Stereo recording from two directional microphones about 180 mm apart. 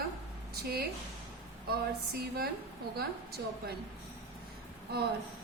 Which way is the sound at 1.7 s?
60° right (ahead or behind).